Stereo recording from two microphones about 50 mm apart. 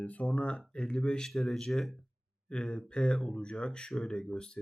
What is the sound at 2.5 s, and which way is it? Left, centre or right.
Speech, centre.